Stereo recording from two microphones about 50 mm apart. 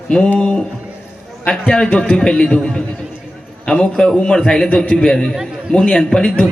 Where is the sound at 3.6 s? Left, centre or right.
Centre.